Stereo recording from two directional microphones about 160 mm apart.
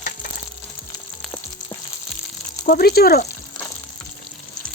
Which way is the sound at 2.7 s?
70° left (ahead or behind).